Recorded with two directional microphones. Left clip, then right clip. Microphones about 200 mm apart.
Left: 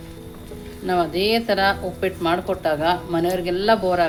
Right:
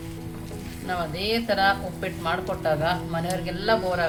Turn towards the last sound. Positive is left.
turn(degrees=45)  # may be behind; listen again after turning